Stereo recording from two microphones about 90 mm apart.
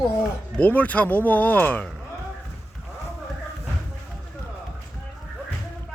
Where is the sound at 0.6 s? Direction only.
15° left (ahead or behind).